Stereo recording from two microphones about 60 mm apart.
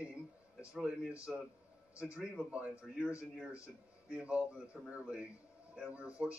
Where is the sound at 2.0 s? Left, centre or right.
Centre.